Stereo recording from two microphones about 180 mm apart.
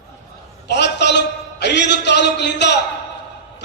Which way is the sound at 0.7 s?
75° left (ahead or behind).